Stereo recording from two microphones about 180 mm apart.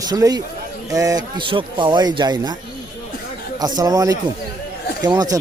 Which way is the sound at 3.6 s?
20° right (ahead or behind).